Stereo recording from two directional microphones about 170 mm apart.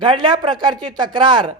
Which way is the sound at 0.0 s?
25° right (ahead or behind).